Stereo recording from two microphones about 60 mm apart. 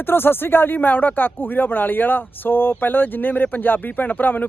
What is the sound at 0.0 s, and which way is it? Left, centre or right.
Speech, left.